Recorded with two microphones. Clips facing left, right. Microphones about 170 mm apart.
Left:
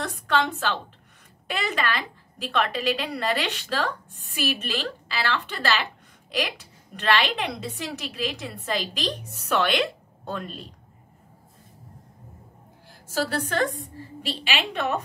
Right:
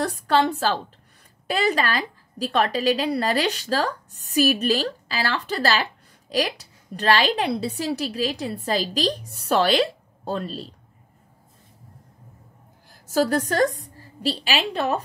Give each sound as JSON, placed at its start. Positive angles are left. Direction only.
{"t": 0.0, "sound": "a sound", "side_deg": -35}
{"t": 1.5, "sound": "a woman's voice", "side_deg": -35}
{"t": 13.0, "sound": "a woman's voice", "side_deg": -45}